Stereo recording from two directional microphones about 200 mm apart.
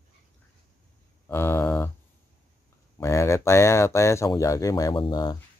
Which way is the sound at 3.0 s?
15° left (ahead or behind).